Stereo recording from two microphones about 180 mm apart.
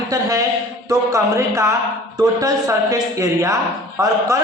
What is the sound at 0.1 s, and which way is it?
A woman's voice, 20° right (ahead or behind).